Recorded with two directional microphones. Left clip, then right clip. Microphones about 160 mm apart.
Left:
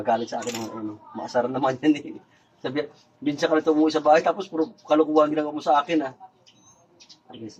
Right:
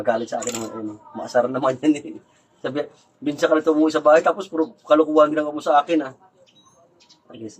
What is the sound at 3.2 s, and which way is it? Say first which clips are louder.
Speech: right 3 dB; centre (ahead or behind).